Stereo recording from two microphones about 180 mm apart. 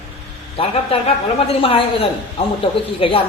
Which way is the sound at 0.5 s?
35° left (ahead or behind).